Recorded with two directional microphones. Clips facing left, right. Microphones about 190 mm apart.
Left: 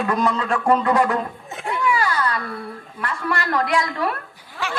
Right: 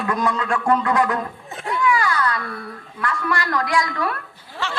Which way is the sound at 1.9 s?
25° left (ahead or behind).